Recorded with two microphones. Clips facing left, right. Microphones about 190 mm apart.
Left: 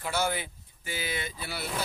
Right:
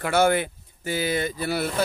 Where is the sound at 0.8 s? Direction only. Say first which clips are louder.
Right 10 dB; 45° right (ahead or behind).